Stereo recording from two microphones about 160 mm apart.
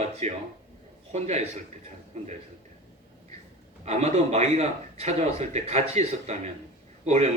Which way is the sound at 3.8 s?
45° right (ahead or behind).